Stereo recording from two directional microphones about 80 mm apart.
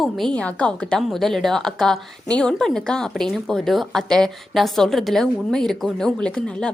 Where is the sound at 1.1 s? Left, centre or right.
Centre.